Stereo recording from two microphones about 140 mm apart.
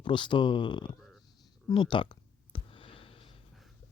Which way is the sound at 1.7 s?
35° left (ahead or behind).